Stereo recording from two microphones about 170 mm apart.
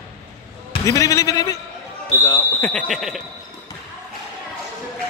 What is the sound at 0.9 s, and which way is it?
Speech, 20° left (ahead or behind).